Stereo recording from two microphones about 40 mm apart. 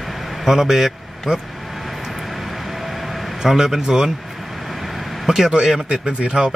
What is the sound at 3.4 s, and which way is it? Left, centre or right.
Speech, centre.